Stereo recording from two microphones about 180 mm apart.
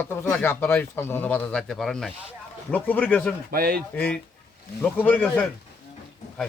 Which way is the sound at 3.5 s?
55° right (ahead or behind).